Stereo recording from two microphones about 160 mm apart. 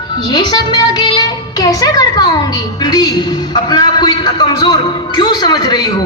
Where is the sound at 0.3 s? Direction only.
30° left (ahead or behind).